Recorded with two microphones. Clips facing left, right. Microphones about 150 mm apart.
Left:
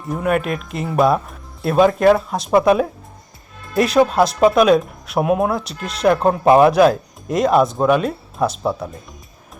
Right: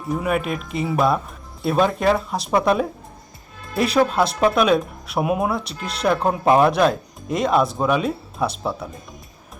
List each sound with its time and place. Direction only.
0.1 s speech: centre (ahead or behind)